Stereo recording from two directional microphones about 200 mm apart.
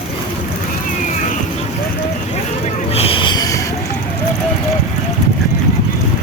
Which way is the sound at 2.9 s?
25° left (ahead or behind).